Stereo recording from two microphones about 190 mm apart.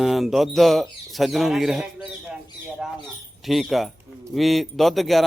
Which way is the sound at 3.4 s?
Centre (ahead or behind).